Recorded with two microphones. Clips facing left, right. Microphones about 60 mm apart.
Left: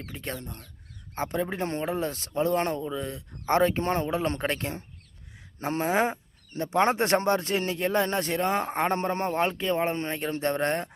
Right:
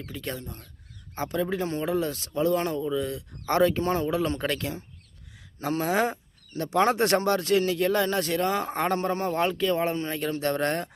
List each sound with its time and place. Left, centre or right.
0.1 s speech: left
1.1 s speech: left